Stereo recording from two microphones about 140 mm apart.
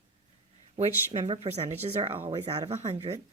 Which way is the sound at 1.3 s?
50° right (ahead or behind).